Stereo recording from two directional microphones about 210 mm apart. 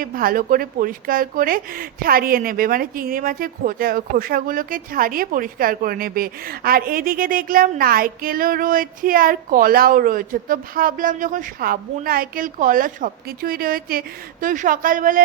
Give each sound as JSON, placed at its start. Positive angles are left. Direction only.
{"t": 0.0, "sound": "a woman's voice", "side_deg": -45}